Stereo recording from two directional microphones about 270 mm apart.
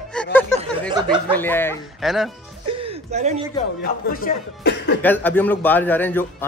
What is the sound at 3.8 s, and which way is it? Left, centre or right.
A man's voice, left.